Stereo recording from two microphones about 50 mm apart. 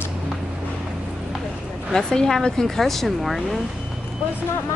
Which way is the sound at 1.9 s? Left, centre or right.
Centre.